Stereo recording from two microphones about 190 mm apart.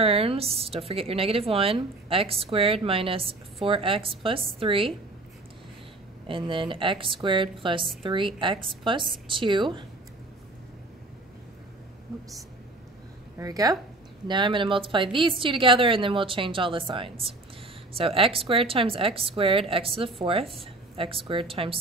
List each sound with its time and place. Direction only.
0.0 s a woman's voice: 30° right (ahead or behind)
6.2 s a woman's voice: 25° right (ahead or behind)
13.4 s a woman's voice: 20° right (ahead or behind)